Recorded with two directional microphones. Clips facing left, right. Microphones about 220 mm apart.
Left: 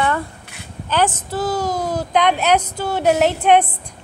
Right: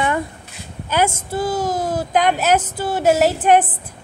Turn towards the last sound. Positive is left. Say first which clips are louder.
# even
turn(degrees=-5)  # may be behind; listen again after turning